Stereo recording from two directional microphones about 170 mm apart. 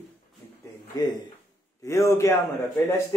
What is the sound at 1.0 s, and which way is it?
A man's voice, 20° left (ahead or behind).